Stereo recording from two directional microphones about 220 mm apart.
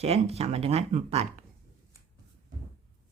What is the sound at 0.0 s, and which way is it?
Speech, 25° right (ahead or behind).